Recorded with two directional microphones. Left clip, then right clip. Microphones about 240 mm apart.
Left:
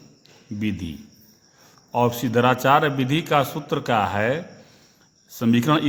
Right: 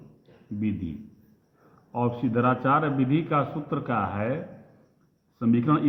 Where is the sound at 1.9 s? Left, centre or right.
Left.